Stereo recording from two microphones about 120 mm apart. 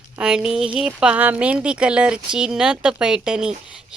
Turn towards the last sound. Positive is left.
turn(degrees=-5)  # may be behind; listen again after turning